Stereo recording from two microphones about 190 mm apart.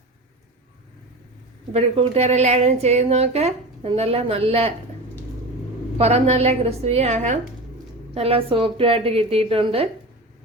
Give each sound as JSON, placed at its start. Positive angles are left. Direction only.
{"t": 1.7, "sound": "a woman's voice", "side_deg": -35}
{"t": 6.0, "sound": "a woman's voice", "side_deg": -35}